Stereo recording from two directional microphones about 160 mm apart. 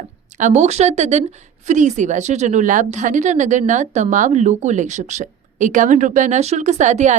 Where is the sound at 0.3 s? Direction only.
45° right (ahead or behind).